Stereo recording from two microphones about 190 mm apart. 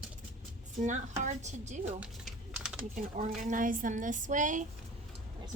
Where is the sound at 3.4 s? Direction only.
45° right (ahead or behind).